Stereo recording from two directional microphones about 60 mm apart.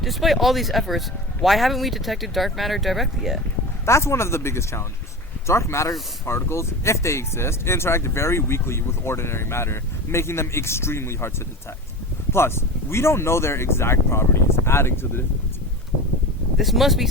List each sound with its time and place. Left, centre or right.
0.0 s speech: centre
3.8 s speech: left
12.3 s speech: left
16.6 s speech: centre